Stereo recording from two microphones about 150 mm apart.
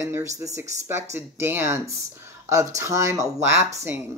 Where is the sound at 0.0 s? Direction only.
20° right (ahead or behind).